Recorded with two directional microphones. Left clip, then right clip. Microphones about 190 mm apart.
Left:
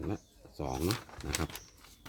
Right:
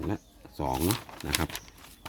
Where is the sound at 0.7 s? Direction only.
40° right (ahead or behind).